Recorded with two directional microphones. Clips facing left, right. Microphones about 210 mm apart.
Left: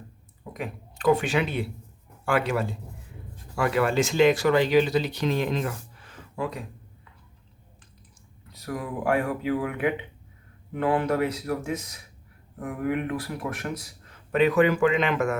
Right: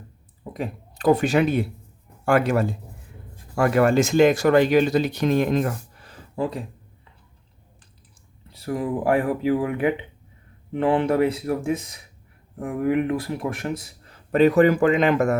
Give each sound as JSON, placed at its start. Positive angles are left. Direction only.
{"t": 0.5, "sound": "speech", "side_deg": -35}
{"t": 8.4, "sound": "speech", "side_deg": -30}